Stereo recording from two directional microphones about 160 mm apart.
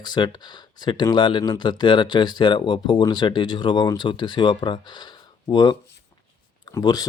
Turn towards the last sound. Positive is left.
turn(degrees=25)  # may be behind; listen again after turning